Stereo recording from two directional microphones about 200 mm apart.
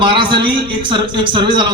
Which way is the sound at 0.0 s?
25° right (ahead or behind).